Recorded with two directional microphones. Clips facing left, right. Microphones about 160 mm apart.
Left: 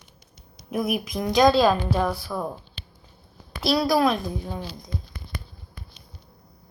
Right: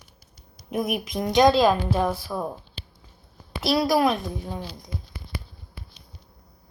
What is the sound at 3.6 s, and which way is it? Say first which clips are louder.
Speech: even; 20° right (ahead or behind).